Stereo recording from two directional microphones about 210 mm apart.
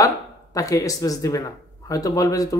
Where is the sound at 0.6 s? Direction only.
15° left (ahead or behind).